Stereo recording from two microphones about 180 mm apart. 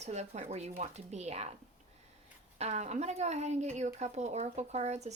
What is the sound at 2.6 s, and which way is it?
Speech, 40° right (ahead or behind).